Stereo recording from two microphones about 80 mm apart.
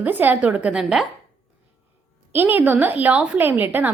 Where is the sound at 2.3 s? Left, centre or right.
Right.